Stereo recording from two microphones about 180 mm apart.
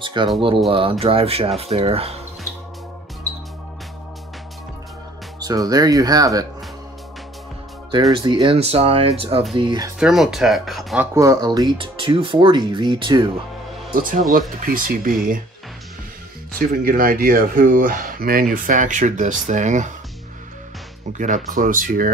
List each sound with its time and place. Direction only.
0.0 s speech: 25° right (ahead or behind)
5.4 s speech: 20° right (ahead or behind)
8.1 s speech: 25° right (ahead or behind)
9.9 s speech: centre (ahead or behind)
11.1 s speech: 20° right (ahead or behind)
14.6 s speech: 50° right (ahead or behind)
16.5 s speech: 55° right (ahead or behind)
21.1 s speech: 40° right (ahead or behind)